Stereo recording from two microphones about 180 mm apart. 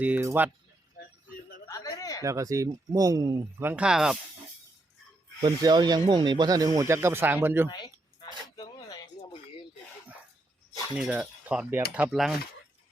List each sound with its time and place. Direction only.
0.0 s speech: 10° right (ahead or behind)
1.6 s a sound: 20° left (ahead or behind)
2.2 s speech: 15° right (ahead or behind)
5.4 s speech: 20° right (ahead or behind)
7.7 s a sound: 25° left (ahead or behind)
10.9 s speech: 5° right (ahead or behind)